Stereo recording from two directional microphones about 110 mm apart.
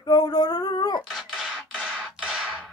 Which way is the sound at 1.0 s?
Centre (ahead or behind).